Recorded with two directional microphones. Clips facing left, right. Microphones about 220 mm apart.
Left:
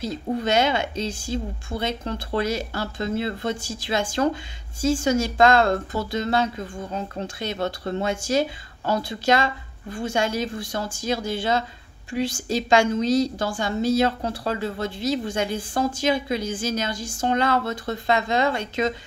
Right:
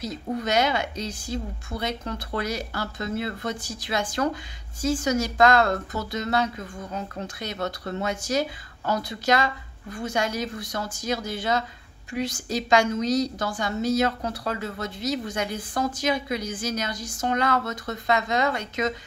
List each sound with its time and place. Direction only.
0.0 s a woman's voice: 30° left (ahead or behind)